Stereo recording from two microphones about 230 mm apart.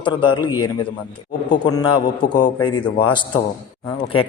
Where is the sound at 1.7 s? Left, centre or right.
Centre.